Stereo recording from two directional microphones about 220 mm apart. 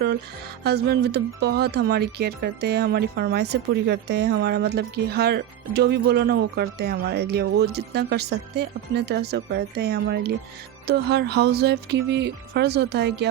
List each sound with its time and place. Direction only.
0.6 s speech: 45° right (ahead or behind)